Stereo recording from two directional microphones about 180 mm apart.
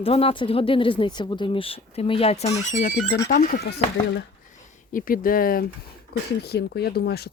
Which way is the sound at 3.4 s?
55° left (ahead or behind).